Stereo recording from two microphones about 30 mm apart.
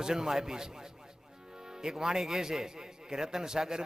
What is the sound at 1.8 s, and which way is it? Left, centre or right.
A man's voice, right.